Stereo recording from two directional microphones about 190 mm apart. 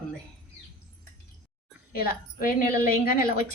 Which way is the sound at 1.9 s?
50° left (ahead or behind).